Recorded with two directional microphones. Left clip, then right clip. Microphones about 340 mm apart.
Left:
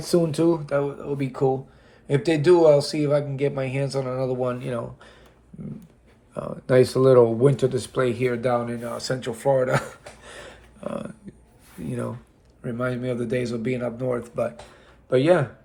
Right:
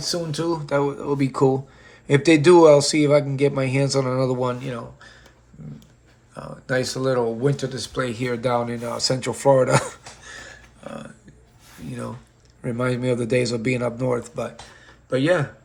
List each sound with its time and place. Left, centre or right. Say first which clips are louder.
0.0 s speech: left 4 dB; centre
4.6 s speech: left 2 dB; centre
6.3 s speech: left 5 dB; centre
10.2 s a sound: right 4 dB; centre
11.9 s speech: left 2 dB; centre
12.6 s speech: right 4 dB; centre